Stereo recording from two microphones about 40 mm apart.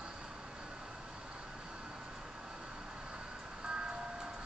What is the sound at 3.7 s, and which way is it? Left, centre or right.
Vehicle, right.